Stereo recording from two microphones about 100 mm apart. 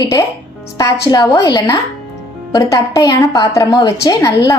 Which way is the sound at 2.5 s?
35° left (ahead or behind).